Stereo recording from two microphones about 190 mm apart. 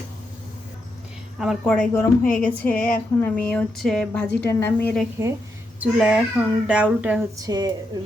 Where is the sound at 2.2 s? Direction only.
45° left (ahead or behind).